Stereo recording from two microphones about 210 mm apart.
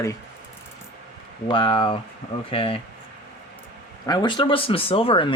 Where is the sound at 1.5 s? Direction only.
25° left (ahead or behind).